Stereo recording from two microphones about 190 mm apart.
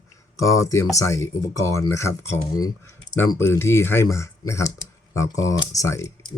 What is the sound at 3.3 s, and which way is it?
Speech, 15° left (ahead or behind).